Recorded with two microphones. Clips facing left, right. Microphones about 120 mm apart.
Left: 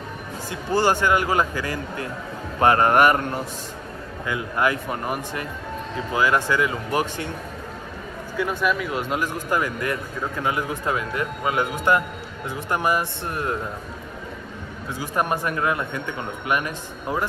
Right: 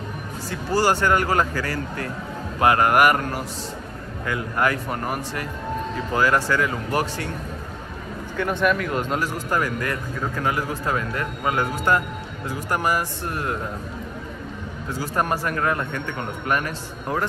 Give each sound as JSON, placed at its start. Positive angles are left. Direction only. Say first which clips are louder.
{"t": 0.5, "sound": "speech", "louder": "even", "side_deg": 20}
{"t": 2.6, "sound": "speech", "louder": "left 1 dB", "side_deg": 30}
{"t": 4.3, "sound": "speech", "louder": "even", "side_deg": 20}
{"t": 8.4, "sound": "speech", "louder": "right 2 dB", "side_deg": 5}
{"t": 9.2, "sound": "speech", "louder": "even", "side_deg": 20}
{"t": 14.9, "sound": "speech", "louder": "even", "side_deg": 20}